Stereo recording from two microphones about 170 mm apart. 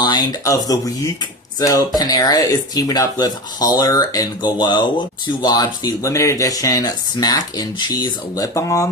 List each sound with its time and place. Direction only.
0.0 s speech: 25° left (ahead or behind)